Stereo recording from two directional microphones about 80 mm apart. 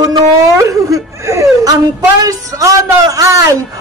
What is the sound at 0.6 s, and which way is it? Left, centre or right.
Whimper, right.